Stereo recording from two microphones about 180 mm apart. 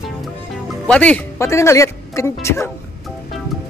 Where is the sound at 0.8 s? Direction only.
5° left (ahead or behind).